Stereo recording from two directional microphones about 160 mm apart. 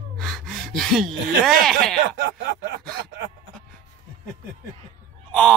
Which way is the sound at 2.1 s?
90° right.